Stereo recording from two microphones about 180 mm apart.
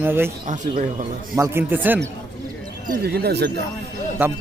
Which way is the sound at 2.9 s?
60° right (ahead or behind).